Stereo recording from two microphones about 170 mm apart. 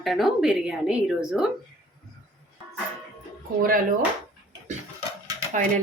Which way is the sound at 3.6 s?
55° right (ahead or behind).